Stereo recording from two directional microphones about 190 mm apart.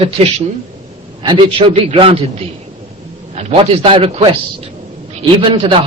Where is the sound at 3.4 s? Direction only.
35° right (ahead or behind).